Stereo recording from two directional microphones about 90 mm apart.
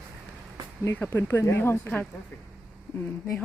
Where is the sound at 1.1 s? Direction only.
25° left (ahead or behind).